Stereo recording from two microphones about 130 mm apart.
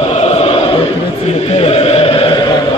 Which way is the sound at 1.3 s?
55° left (ahead or behind).